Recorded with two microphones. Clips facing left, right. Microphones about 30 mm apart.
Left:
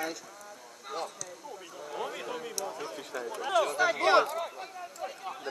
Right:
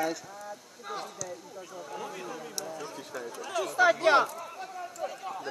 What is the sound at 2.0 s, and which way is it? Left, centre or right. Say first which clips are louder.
Speech: left 4 dB; left.